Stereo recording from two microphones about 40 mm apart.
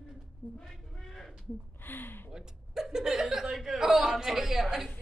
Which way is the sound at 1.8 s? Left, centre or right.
Left.